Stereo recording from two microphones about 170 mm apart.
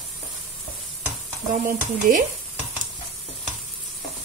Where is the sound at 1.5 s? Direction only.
50° right (ahead or behind).